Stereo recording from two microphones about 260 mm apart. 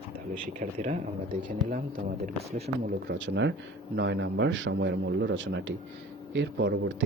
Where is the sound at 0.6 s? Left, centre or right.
Right.